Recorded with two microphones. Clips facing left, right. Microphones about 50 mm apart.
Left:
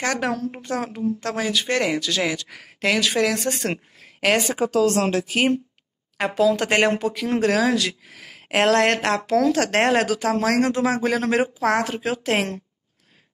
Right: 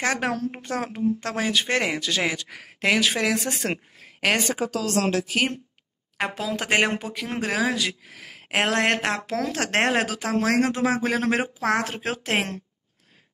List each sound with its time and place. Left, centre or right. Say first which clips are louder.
0.0 s speech: left 1 dB; right
3.3 s speech: left 2 dB; centre
4.6 s speech: left 5 dB; left
6.5 s speech: left 3 dB; centre; by 11.8 s right
11.8 s speech: left 4 dB; right